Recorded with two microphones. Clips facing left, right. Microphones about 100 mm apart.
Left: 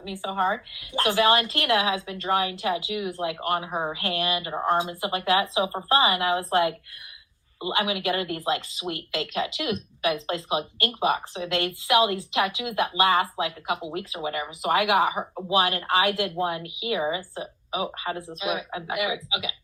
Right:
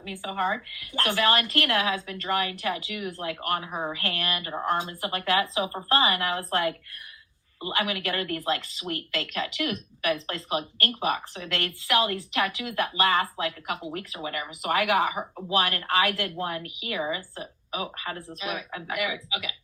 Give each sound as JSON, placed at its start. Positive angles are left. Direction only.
{"t": 0.0, "sound": "speech", "side_deg": 25}
{"t": 4.5, "sound": "speech", "side_deg": 35}
{"t": 4.8, "sound": "speech", "side_deg": 20}